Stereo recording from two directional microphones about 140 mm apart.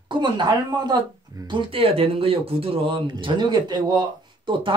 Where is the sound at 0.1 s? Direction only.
35° right (ahead or behind).